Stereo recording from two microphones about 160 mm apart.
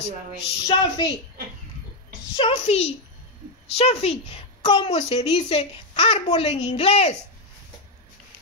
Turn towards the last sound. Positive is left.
turn(degrees=40)  # may be behind; listen again after turning